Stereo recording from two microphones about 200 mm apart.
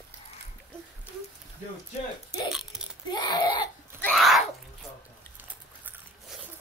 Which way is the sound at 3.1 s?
20° left (ahead or behind).